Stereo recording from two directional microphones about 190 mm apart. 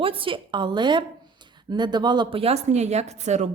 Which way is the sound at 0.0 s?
30° right (ahead or behind).